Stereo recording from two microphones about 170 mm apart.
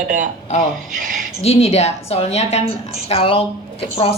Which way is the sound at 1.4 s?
40° left (ahead or behind).